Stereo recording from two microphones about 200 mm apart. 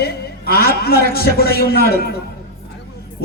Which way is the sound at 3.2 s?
50° left (ahead or behind).